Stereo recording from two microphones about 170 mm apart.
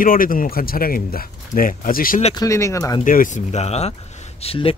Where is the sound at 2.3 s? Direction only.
20° left (ahead or behind).